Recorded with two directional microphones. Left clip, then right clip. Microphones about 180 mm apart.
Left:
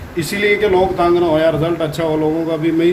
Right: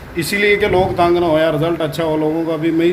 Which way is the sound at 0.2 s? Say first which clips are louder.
Right 1 dB; 40° right (ahead or behind).